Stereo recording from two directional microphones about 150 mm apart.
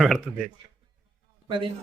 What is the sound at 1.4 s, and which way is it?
Speech, 35° right (ahead or behind).